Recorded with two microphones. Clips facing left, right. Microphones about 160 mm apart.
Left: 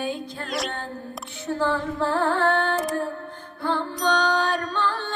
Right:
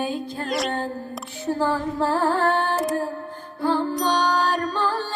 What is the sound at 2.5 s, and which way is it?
Music, 40° right (ahead or behind).